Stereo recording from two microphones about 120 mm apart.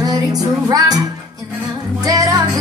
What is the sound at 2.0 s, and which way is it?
Music, 30° right (ahead or behind).